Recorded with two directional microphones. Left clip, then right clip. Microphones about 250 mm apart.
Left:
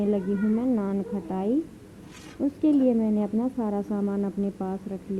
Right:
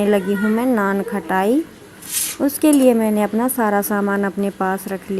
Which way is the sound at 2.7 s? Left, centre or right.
Centre.